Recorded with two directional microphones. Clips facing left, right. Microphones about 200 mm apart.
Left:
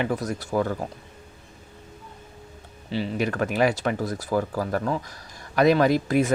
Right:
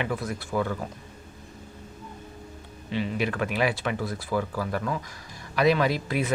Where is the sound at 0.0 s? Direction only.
40° left (ahead or behind).